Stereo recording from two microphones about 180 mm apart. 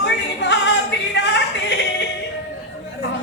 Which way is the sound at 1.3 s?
80° left.